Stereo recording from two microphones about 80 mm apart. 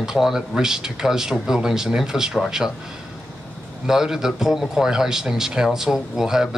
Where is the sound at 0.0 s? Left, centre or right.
Centre.